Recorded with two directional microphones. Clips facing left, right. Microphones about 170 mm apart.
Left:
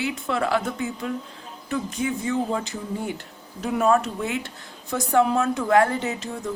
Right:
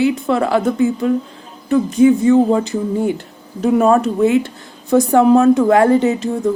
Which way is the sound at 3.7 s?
35° right (ahead or behind).